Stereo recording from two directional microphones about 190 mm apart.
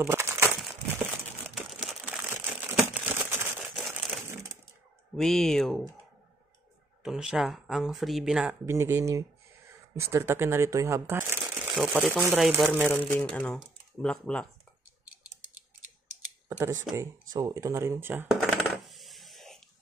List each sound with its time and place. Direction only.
0.0 s crumpling: 10° right (ahead or behind)
1.5 s crumpling: centre (ahead or behind)
3.7 s crushing: centre (ahead or behind)
4.3 s a sound: 15° right (ahead or behind)
5.1 s speech: centre (ahead or behind)
7.0 s speech: 5° right (ahead or behind)
8.6 s speech: 15° right (ahead or behind)
12.9 s speech: 10° left (ahead or behind)
16.4 s speech: 15° right (ahead or behind)
16.9 s coin: 15° right (ahead or behind); by 19.6 s centre (ahead or behind)